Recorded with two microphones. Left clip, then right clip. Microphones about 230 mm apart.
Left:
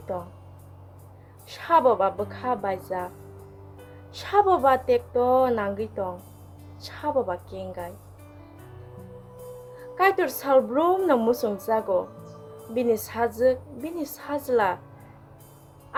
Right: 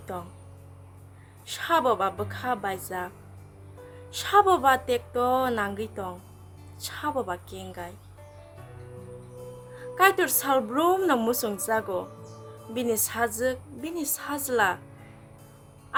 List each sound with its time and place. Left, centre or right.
0.1 s a woman's voice: centre
1.5 s a woman's voice: centre
4.1 s a woman's voice: centre
9.9 s a woman's voice: centre